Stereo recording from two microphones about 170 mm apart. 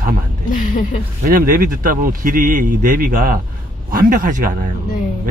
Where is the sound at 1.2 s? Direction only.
55° right (ahead or behind).